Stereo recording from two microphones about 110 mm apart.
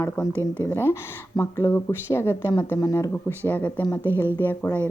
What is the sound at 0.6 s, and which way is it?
A woman's voice, 20° left (ahead or behind).